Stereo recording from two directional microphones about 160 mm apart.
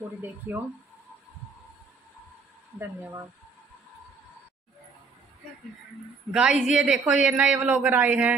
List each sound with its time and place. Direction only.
0.5 s a woman's voice: 15° right (ahead or behind)
2.8 s a woman's voice: 15° right (ahead or behind)
6.3 s a woman's voice: 5° right (ahead or behind)